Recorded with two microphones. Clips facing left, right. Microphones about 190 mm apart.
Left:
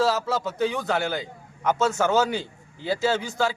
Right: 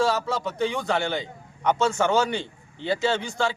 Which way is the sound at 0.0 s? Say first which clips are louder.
Left 1 dB; 5° left (ahead or behind).